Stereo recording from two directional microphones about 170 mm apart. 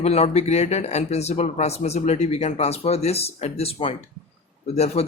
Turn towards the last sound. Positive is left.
turn(degrees=35)  # may be behind; listen again after turning